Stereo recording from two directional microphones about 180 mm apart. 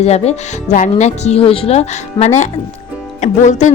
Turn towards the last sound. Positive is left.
turn(degrees=40)  # may be behind; listen again after turning